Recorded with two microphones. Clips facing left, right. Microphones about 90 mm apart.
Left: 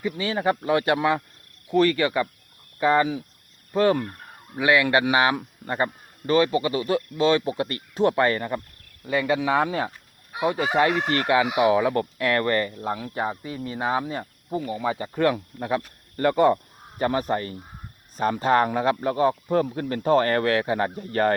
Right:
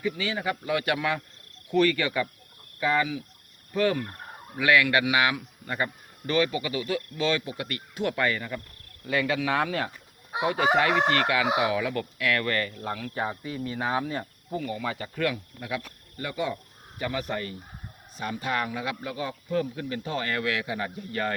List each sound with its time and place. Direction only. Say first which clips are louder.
0.0 s speech: left 5 dB; 30° left (ahead or behind)
9.0 s speech: left 4 dB; 25° left (ahead or behind)
10.3 s fowl: left 2 dB; 25° right (ahead or behind)
10.9 s chicken: right 1 dB; 30° right (ahead or behind)
11.6 s speech: left 7 dB; 30° left (ahead or behind)
15.6 s speech: left 8 dB; 45° left (ahead or behind)
17.0 s speech: left 7 dB; 40° left (ahead or behind)